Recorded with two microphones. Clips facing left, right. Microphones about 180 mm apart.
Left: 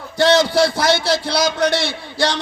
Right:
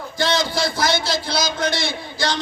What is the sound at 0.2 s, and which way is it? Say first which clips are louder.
A man's voice: left 7 dB; 70° left (ahead or behind).